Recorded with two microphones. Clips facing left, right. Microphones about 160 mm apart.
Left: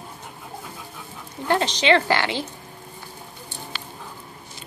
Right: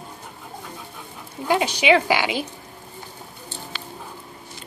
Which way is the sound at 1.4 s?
10° right (ahead or behind).